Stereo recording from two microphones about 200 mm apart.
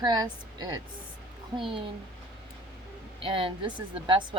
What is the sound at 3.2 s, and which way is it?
A woman's voice, 25° right (ahead or behind).